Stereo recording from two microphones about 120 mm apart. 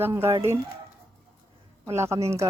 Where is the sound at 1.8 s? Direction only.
25° right (ahead or behind).